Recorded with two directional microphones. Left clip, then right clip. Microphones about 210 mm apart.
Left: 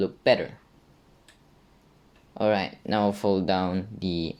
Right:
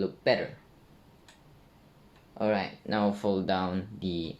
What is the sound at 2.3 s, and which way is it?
Speech, 50° left (ahead or behind).